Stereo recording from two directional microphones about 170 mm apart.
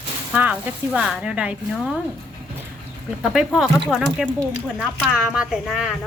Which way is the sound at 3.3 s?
5° right (ahead or behind).